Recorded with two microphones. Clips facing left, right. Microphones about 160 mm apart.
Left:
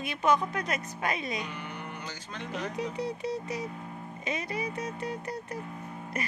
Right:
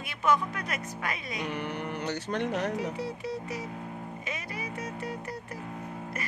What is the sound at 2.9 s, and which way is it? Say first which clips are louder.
Speech: left 2 dB; 20° left (ahead or behind).